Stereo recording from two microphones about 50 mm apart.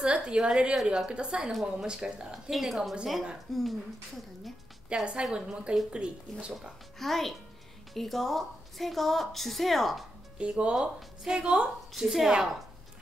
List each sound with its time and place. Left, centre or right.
0.0 s a woman's voice: centre
1.5 s a woman's voice: centre
1.9 s a woman's voice: centre
2.5 s a woman's voice: centre
4.8 s a woman's voice: right
7.0 s a woman's voice: centre
10.3 s speech: right
11.9 s a woman's voice: centre